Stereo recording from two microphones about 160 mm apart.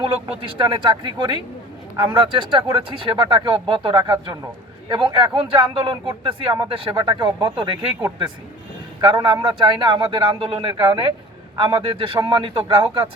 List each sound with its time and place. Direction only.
0.0 s speech: 30° right (ahead or behind)
9.0 s speech: 30° right (ahead or behind)